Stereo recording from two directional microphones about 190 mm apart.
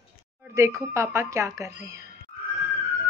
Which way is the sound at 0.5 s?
15° right (ahead or behind).